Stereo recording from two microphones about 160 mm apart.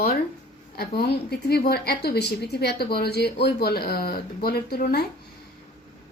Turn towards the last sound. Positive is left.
turn(degrees=75)  # may be behind; listen again after turning